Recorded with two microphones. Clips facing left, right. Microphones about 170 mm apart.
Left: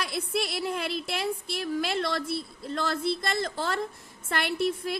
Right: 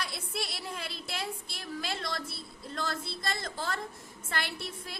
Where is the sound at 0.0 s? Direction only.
65° left (ahead or behind).